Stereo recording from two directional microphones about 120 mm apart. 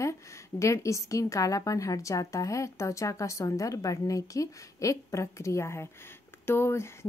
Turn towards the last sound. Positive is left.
turn(degrees=20)  # may be behind; listen again after turning